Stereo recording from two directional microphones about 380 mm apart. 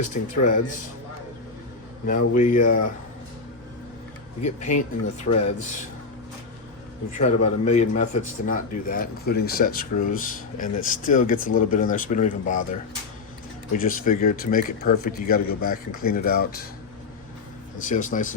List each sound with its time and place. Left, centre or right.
0.0 s speech: centre
2.0 s speech: left
4.8 s speech: centre
7.6 s speech: centre
13.7 s speech: left
17.7 s speech: centre